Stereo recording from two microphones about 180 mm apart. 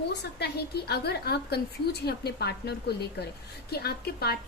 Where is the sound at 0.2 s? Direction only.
65° left (ahead or behind).